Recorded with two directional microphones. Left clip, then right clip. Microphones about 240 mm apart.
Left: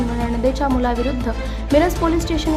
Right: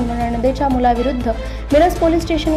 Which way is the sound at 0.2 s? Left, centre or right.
Centre.